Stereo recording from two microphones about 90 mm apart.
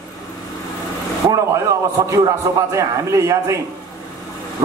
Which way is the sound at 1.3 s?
35° right (ahead or behind).